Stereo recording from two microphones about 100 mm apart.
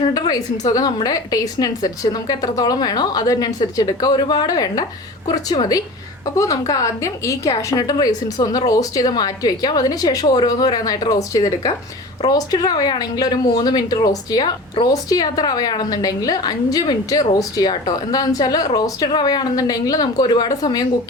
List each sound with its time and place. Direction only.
0.1 s a woman's voice: 40° left (ahead or behind)